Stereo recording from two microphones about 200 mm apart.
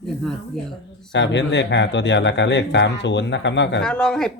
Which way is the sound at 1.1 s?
65° left (ahead or behind).